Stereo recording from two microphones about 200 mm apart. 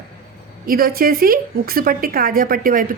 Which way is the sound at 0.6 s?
45° right (ahead or behind).